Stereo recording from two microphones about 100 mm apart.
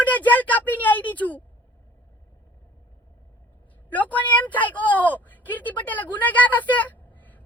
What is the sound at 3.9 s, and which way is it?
Speech, 15° left (ahead or behind).